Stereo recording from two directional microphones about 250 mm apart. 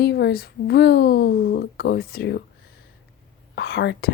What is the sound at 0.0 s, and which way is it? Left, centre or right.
Speech, left.